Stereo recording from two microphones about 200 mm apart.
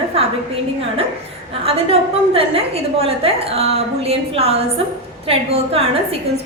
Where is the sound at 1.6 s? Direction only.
30° right (ahead or behind).